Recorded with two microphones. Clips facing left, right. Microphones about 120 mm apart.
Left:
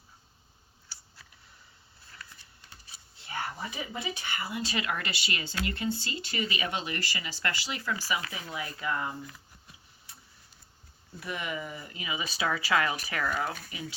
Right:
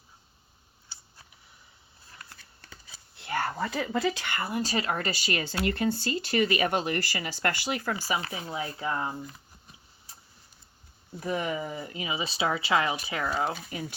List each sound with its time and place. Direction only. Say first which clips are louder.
3.2 s speech: right 6 dB; 70° right (ahead or behind)
4.6 s speech: right 3 dB; 35° right (ahead or behind)
8.0 s speech: right 3 dB; 35° right (ahead or behind)
11.2 s speech: right 6 dB; 40° right (ahead or behind)